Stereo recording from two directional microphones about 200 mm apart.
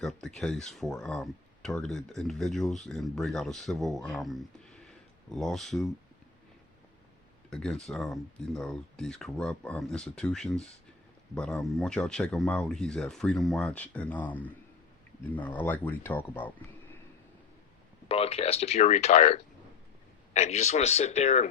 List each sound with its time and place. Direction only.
0.0 s speech: centre (ahead or behind)
7.5 s speech: centre (ahead or behind)
18.1 s speech: 30° left (ahead or behind)